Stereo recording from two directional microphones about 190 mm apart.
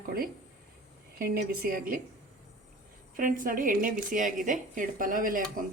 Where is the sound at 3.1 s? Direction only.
45° right (ahead or behind).